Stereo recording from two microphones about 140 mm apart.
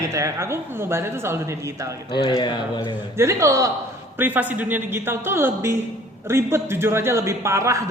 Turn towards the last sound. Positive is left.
turn(degrees=-20)  # may be behind; listen again after turning